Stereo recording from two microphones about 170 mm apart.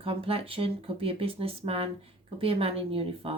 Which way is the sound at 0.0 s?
35° right (ahead or behind).